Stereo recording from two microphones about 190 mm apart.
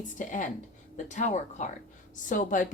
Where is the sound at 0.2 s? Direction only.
45° left (ahead or behind).